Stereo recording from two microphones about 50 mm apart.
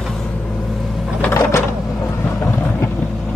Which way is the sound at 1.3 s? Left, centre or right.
Left.